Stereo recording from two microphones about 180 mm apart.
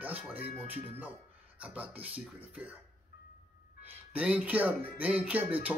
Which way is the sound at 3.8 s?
10° right (ahead or behind).